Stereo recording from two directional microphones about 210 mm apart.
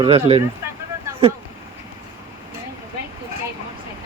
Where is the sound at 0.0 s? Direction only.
30° right (ahead or behind).